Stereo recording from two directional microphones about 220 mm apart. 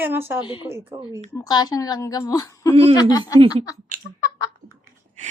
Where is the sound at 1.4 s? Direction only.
20° left (ahead or behind).